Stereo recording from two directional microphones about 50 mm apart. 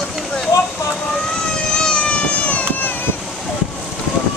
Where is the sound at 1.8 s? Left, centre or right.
Centre.